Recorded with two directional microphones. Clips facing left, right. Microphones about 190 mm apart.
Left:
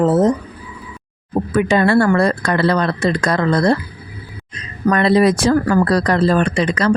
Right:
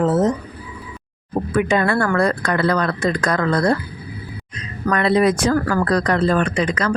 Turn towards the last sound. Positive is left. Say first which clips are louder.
# left 4 dB
turn(degrees=30)  # may be behind; listen again after turning